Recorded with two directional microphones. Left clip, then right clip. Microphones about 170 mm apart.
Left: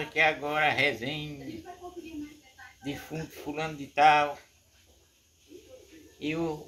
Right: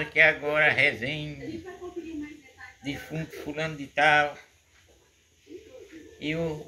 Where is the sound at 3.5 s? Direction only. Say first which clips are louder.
Even; 30° left (ahead or behind).